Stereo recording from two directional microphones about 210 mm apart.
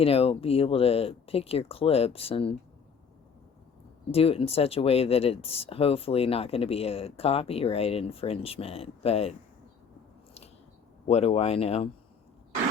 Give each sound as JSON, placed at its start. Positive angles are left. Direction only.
{"t": 0.0, "sound": "speech", "side_deg": 25}
{"t": 4.1, "sound": "speech", "side_deg": 25}
{"t": 11.0, "sound": "speech", "side_deg": 30}